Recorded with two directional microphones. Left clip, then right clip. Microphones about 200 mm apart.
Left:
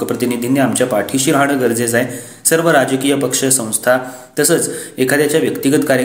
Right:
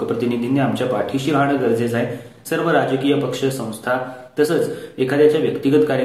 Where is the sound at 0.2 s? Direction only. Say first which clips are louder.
Left 4 dB; 40° left (ahead or behind).